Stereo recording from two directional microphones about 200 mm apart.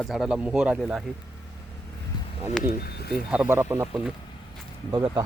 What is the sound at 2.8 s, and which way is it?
Speech, 50° left (ahead or behind).